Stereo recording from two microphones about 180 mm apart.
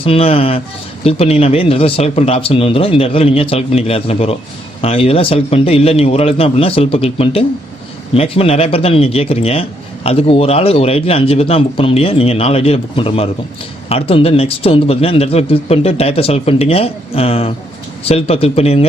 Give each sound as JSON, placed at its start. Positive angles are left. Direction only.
{"t": 0.0, "sound": "speech", "side_deg": 30}